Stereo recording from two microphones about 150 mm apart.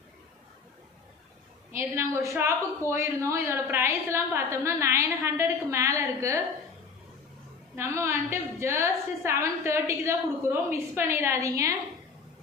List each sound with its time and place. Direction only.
1.7 s a woman's voice: 20° right (ahead or behind)
7.8 s a woman's voice: 20° right (ahead or behind)